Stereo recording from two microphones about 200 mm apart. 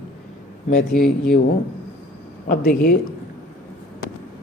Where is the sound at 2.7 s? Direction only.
45° left (ahead or behind).